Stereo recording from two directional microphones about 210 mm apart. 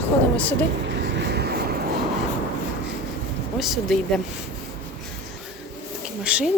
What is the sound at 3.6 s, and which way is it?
Speech, centre (ahead or behind).